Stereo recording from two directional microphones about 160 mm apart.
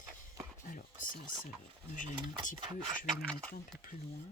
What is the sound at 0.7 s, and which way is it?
Chopping, 55° left (ahead or behind).